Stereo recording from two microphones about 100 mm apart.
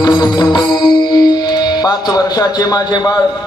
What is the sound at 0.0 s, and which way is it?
Music, 40° left (ahead or behind).